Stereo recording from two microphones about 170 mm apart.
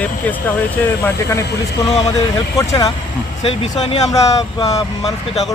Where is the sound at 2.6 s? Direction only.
20° left (ahead or behind).